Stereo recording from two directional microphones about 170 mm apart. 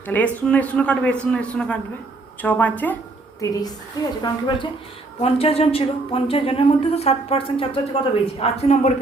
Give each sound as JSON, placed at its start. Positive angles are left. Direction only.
{"t": 0.1, "sound": "a man's voice", "side_deg": 10}
{"t": 3.4, "sound": "a woman's voice", "side_deg": 20}
{"t": 5.2, "sound": "a woman's voice", "side_deg": 35}